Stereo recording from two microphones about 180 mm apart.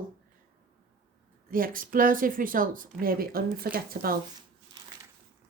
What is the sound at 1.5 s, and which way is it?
Speech, 50° right (ahead or behind).